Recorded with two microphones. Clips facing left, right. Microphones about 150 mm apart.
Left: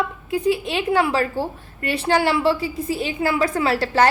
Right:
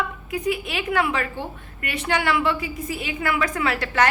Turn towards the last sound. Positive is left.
turn(degrees=30)  # may be behind; listen again after turning